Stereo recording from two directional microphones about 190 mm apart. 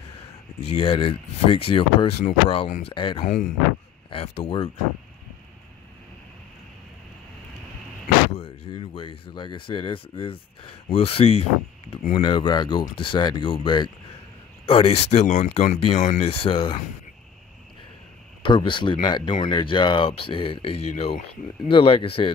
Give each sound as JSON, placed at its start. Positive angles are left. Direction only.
{"t": 0.7, "sound": "speech", "side_deg": 30}
{"t": 3.3, "sound": "speech", "side_deg": 45}
{"t": 4.1, "sound": "speech", "side_deg": 30}
{"t": 8.4, "sound": "speech", "side_deg": 30}
{"t": 18.4, "sound": "speech", "side_deg": 25}